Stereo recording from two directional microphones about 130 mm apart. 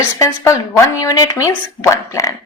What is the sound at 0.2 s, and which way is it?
Speech, 25° left (ahead or behind).